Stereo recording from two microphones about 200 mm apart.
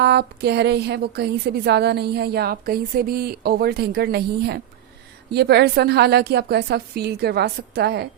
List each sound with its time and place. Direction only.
0.0 s a woman's voice: 55° right (ahead or behind)